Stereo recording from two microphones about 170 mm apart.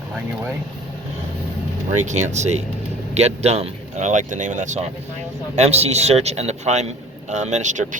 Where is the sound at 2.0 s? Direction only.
45° right (ahead or behind).